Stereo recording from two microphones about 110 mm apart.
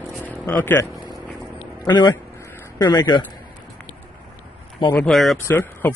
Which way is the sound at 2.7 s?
40° left (ahead or behind).